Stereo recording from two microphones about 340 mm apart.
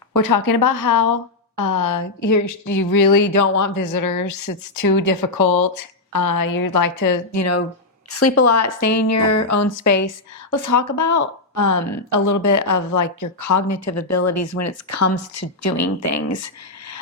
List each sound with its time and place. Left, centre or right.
0.1 s speech: left